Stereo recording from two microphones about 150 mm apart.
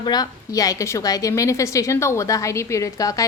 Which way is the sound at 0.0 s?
25° left (ahead or behind).